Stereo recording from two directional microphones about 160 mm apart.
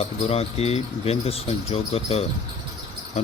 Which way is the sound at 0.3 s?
40° left (ahead or behind).